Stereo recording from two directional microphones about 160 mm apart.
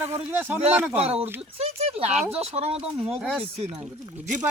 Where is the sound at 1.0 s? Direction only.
40° right (ahead or behind).